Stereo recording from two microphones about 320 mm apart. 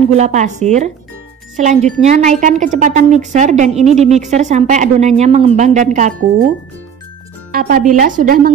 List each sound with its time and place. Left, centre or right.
0.1 s speech: right
7.5 s speech: right